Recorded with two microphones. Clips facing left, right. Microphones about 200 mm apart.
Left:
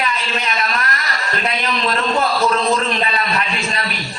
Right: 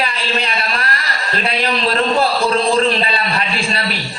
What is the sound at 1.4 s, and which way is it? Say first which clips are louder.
A man's voice: right 3 dB; 30° right (ahead or behind).